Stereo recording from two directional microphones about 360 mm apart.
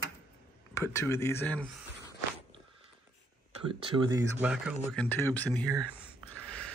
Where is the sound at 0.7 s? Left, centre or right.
Centre.